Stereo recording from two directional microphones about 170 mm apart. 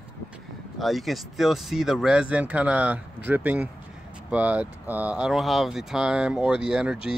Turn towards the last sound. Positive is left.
turn(degrees=-5)  # may be behind; listen again after turning